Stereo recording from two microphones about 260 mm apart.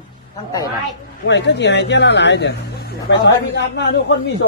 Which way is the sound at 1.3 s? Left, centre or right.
Left.